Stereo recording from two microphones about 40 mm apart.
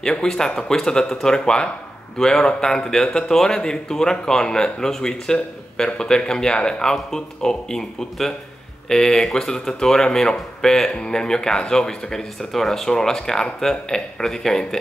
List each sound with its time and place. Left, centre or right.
0.0 s speech: centre